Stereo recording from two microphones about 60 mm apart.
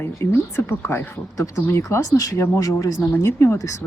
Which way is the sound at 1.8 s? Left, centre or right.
Left.